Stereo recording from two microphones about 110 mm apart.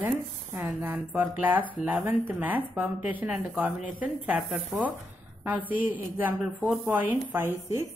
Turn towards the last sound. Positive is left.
turn(degrees=-20)  # may be behind; listen again after turning